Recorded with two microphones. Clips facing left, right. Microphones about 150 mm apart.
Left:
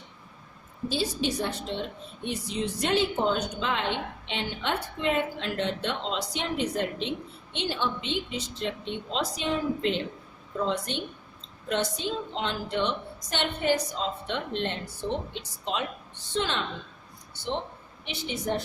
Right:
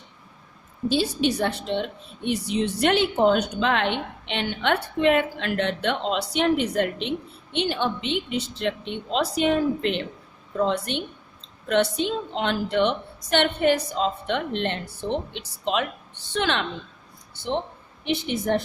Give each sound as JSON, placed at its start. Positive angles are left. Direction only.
{"t": 0.9, "sound": "a woman's voice", "side_deg": -65}
{"t": 18.0, "sound": "a woman's voice", "side_deg": -60}